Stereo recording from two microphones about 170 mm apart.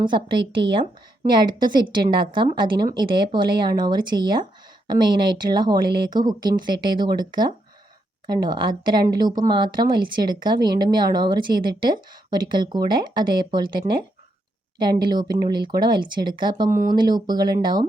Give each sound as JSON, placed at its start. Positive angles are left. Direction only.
{"t": 0.0, "sound": "speech", "side_deg": -30}
{"t": 15.0, "sound": "speech", "side_deg": -25}
{"t": 16.6, "sound": "speech", "side_deg": -50}
{"t": 16.9, "sound": "speech", "side_deg": -25}